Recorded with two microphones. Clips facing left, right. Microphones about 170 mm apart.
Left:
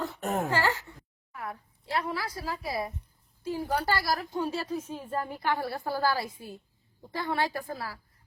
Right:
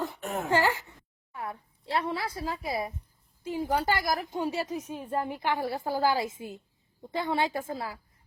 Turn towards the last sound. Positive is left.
turn(degrees=-20)  # may be behind; listen again after turning